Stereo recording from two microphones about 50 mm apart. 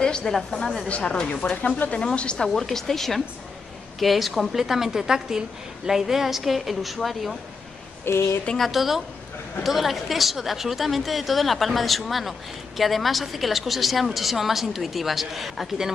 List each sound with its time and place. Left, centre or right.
0.0 s a sound: centre
0.3 s a woman's voice: centre
0.8 s speech: left
1.1 s speech: centre
1.6 s speech: left
2.3 s a woman's voice: centre
8.0 s a woman's voice: left
8.5 s a woman's voice: centre